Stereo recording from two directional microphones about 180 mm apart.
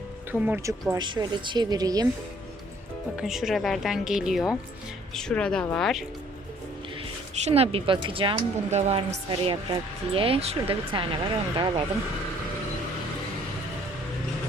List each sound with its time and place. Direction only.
0.3 s speech: 10° right (ahead or behind)
3.2 s speech: centre (ahead or behind)
7.3 s speech: 35° right (ahead or behind)